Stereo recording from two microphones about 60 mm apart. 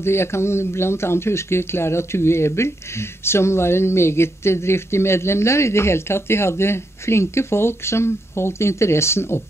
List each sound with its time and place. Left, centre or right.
0.0 s speech: left